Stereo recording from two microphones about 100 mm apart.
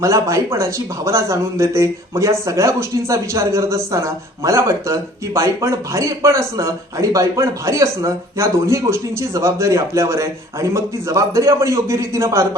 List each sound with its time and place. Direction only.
0.0 s speech: 30° right (ahead or behind)